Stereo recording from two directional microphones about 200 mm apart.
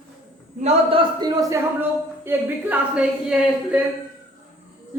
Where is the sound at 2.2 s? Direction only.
5° right (ahead or behind).